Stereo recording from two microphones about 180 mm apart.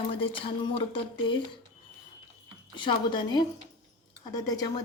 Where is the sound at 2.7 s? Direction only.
25° left (ahead or behind).